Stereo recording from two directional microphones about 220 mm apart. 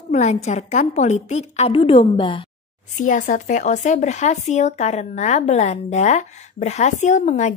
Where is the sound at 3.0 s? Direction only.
35° left (ahead or behind).